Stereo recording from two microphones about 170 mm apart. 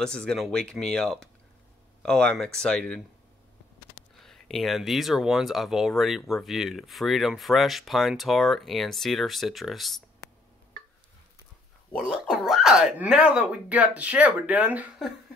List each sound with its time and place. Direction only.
0.0 s speech: 5° left (ahead or behind)
4.2 s speech: centre (ahead or behind)
12.0 s speech: 5° right (ahead or behind)